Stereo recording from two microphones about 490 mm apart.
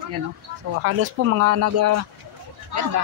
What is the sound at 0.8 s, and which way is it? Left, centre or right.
Speech, right.